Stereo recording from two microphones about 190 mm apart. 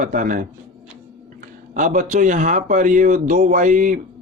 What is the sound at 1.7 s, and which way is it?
Speech, 40° right (ahead or behind).